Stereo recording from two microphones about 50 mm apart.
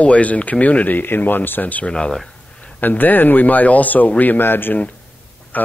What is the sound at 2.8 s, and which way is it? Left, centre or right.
Speech, left.